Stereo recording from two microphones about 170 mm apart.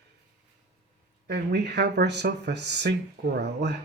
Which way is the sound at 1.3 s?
80° right.